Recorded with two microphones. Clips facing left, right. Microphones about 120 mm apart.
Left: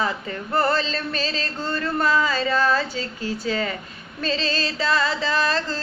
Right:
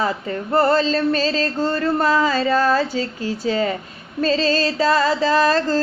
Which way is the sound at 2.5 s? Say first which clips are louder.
Right 3 dB; 35° right (ahead or behind).